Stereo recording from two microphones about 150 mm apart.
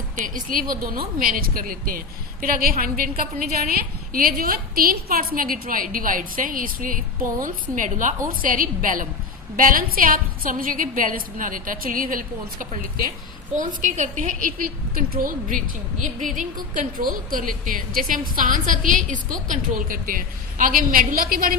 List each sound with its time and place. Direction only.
0.2 s a woman's voice: 65° right (ahead or behind)